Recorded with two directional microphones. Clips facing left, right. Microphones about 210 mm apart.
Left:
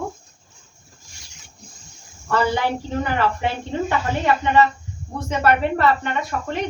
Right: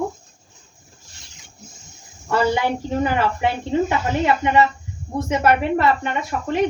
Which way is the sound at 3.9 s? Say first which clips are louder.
Right 1 dB; 15° right (ahead or behind).